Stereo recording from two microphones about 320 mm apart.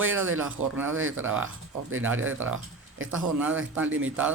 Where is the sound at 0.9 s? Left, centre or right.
Right.